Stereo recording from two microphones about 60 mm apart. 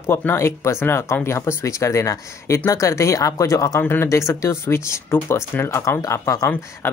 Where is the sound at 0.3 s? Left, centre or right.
Left.